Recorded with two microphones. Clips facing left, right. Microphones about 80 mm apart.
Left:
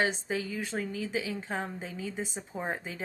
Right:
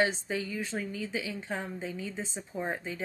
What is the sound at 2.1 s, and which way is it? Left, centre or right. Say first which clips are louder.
Speech: left 1 dB; centre.